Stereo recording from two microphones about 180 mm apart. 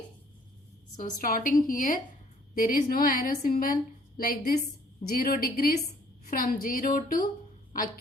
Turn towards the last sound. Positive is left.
turn(degrees=50)  # may be behind; listen again after turning